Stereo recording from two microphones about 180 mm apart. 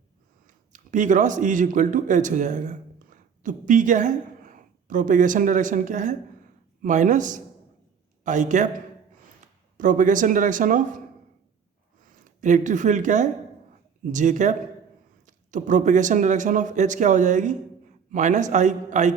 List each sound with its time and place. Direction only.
0.4 s speech: 45° right (ahead or behind)
9.7 s speech: 45° right (ahead or behind)
12.1 s speech: 45° right (ahead or behind)